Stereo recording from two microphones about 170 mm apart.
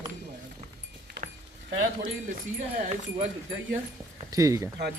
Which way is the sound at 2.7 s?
35° right (ahead or behind).